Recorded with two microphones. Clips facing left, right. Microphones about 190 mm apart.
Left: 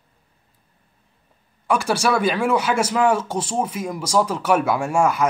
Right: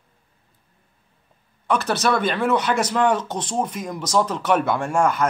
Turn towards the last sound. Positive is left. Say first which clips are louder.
# left 1 dB
turn(degrees=10)  # may be behind; listen again after turning